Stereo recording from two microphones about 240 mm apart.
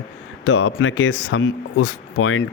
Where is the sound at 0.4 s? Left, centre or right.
Left.